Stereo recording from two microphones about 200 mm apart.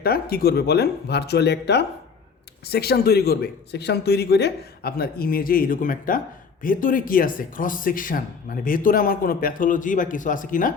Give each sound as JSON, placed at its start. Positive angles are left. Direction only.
{"t": 0.0, "sound": "speech", "side_deg": 50}